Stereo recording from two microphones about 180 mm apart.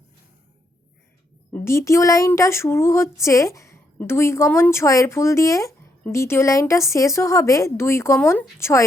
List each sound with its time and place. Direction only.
1.5 s speech: 15° left (ahead or behind)